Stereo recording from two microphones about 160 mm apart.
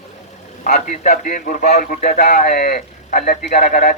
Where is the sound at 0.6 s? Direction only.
55° left (ahead or behind).